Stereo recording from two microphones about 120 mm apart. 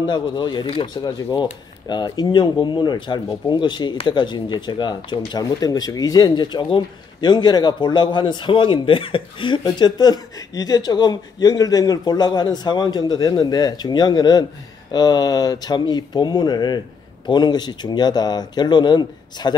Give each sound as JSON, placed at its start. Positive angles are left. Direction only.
{"t": 0.0, "sound": "speech", "side_deg": 40}